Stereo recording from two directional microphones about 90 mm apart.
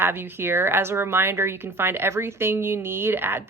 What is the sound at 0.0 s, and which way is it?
Speech, 25° right (ahead or behind).